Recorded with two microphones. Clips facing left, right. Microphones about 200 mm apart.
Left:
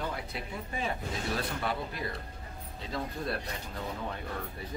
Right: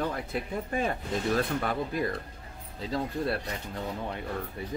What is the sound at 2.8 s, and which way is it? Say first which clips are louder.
Speech: right 6 dB; 35° right (ahead or behind).